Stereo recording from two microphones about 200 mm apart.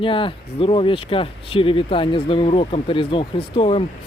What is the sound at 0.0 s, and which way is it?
Speech, 25° left (ahead or behind).